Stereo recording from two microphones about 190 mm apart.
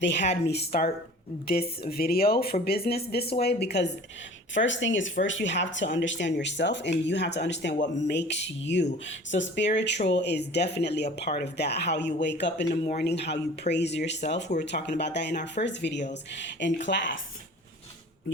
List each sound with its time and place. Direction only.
0.0 s speech: 65° left (ahead or behind)
4.5 s speech: 75° left (ahead or behind)